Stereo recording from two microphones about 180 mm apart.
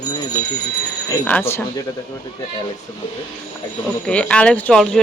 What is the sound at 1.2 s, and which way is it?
Speech, 10° left (ahead or behind).